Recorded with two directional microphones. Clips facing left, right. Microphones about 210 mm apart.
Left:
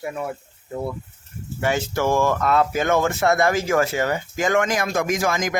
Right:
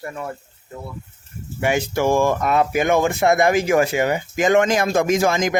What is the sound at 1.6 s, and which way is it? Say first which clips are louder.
Speech: right 2 dB; 15° right (ahead or behind).